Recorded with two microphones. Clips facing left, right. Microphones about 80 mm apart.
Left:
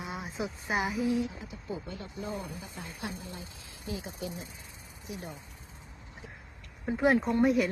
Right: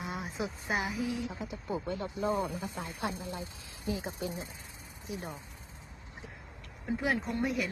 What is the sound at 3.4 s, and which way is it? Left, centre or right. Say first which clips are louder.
Speech: right 3 dB; right.